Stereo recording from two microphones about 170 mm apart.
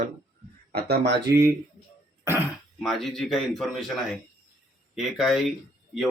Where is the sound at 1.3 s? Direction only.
15° right (ahead or behind).